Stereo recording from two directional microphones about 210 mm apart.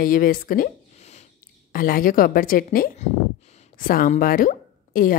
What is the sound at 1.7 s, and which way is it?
A woman's voice, 45° left (ahead or behind).